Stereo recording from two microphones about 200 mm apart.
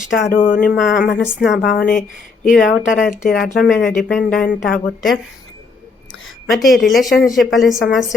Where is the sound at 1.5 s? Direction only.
50° left (ahead or behind).